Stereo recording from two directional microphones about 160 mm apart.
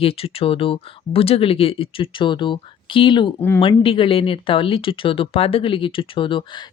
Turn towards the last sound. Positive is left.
turn(degrees=30)  # may be behind; listen again after turning